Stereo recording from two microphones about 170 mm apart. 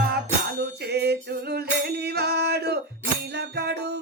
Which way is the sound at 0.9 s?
70° right (ahead or behind).